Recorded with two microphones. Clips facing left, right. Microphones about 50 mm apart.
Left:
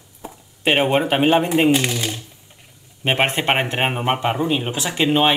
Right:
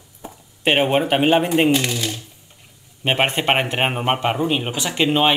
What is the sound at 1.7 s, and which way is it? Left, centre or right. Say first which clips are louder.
Speech: left 1 dB; left.